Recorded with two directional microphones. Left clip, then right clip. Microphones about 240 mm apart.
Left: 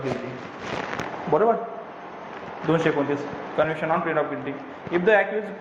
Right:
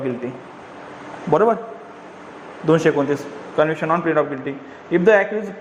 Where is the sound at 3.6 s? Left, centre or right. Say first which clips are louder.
Right 5 dB; right.